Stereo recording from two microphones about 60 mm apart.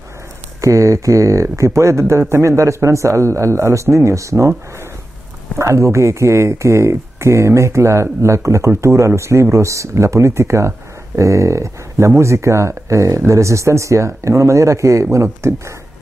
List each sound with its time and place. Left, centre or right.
0.6 s speech: right
5.6 s speech: right